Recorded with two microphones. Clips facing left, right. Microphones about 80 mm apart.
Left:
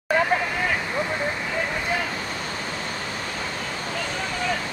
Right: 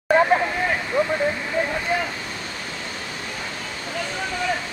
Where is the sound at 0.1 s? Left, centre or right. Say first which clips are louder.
Right 4 dB; right.